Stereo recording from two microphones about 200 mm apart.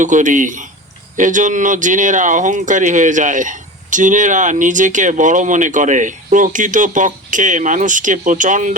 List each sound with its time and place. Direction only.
0.0 s speech: 40° right (ahead or behind)